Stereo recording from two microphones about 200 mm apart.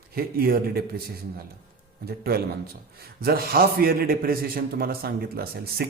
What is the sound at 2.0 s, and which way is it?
A man's voice, 50° right (ahead or behind).